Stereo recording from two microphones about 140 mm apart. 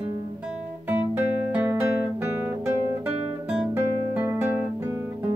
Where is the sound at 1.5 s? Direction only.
15° right (ahead or behind).